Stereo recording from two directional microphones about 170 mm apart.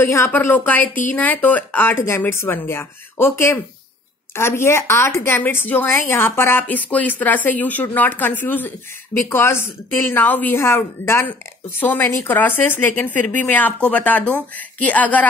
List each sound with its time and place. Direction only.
0.0 s speech: 15° left (ahead or behind)